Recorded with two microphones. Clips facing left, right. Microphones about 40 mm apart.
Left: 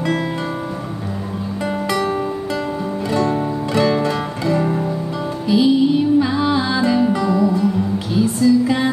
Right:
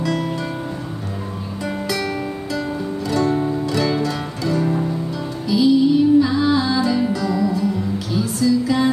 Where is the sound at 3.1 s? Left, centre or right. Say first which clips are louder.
Even; left.